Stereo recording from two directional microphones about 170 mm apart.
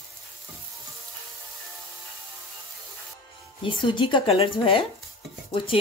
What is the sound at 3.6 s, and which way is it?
Speech, 30° left (ahead or behind).